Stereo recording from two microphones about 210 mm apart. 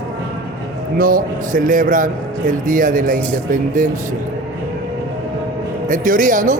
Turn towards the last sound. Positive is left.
turn(degrees=-40)  # may be behind; listen again after turning